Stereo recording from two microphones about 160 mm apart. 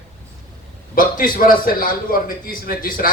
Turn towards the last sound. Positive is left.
turn(degrees=60)  # may be behind; listen again after turning